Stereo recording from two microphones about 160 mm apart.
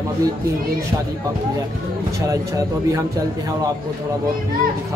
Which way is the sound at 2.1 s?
20° right (ahead or behind).